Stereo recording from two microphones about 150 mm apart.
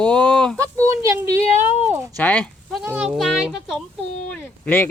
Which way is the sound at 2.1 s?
10° left (ahead or behind).